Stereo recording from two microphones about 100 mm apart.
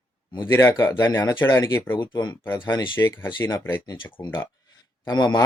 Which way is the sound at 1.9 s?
50° left (ahead or behind).